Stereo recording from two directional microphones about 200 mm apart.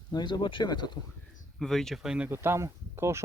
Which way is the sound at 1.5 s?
Centre (ahead or behind).